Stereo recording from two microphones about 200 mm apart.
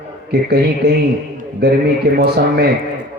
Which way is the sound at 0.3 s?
50° right (ahead or behind).